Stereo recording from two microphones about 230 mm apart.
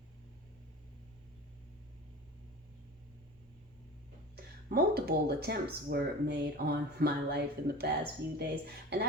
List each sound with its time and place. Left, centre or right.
4.4 s speech: right